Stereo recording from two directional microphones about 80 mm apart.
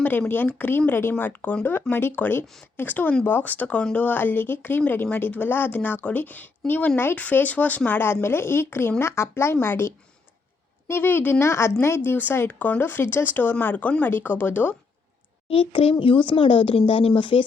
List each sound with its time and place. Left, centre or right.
0.0 s a woman's voice: left
15.7 s speech: left